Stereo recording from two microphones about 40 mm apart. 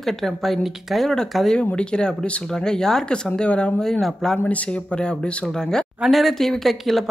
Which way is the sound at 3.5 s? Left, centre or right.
Left.